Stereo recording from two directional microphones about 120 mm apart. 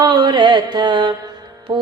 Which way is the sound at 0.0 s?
40° right (ahead or behind).